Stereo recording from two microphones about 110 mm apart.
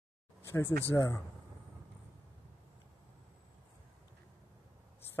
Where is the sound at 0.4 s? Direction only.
25° left (ahead or behind).